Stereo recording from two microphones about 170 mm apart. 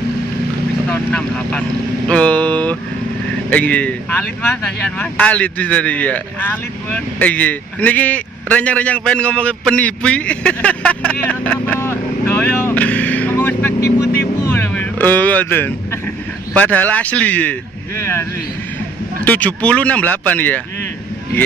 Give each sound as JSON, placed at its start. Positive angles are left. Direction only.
{"t": 0.8, "sound": "speech", "side_deg": 5}
{"t": 13.8, "sound": "speech", "side_deg": 70}
{"t": 14.4, "sound": "speech", "side_deg": 10}
{"t": 19.2, "sound": "speech", "side_deg": 10}